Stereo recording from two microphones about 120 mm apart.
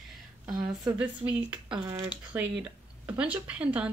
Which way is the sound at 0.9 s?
10° right (ahead or behind).